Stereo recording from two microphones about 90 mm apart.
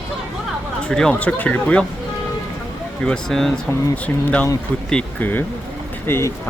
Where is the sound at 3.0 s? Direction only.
5° left (ahead or behind).